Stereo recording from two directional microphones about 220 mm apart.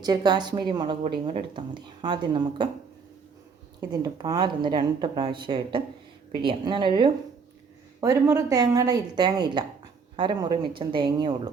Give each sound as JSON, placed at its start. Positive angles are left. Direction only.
{"t": 0.0, "sound": "speech", "side_deg": -20}
{"t": 3.8, "sound": "a woman's voice", "side_deg": -15}